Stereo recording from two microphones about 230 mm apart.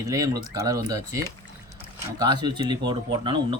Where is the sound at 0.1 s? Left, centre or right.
Centre.